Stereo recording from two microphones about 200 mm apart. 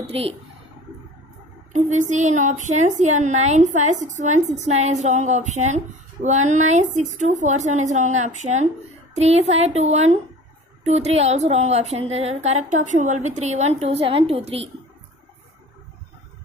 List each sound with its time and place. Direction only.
0.0 s speech: 30° right (ahead or behind)
1.7 s a woman's voice: 35° right (ahead or behind)